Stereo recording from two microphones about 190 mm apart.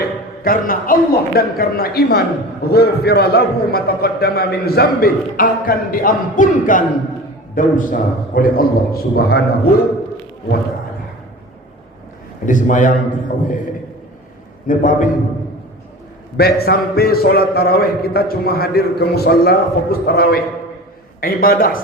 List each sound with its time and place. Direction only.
0.0 s a man's voice: 50° left (ahead or behind)
12.5 s a man's voice: 40° left (ahead or behind)
14.7 s a man's voice: 45° left (ahead or behind)
16.4 s a man's voice: 55° left (ahead or behind)